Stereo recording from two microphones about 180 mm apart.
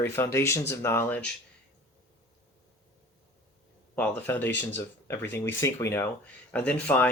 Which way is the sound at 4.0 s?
10° left (ahead or behind).